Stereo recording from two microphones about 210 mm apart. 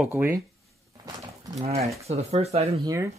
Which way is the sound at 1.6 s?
30° right (ahead or behind).